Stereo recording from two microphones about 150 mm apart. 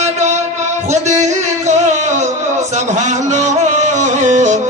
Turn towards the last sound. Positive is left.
turn(degrees=-55)  # may be behind; listen again after turning